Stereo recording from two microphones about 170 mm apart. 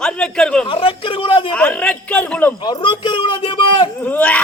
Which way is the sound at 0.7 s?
30° left (ahead or behind).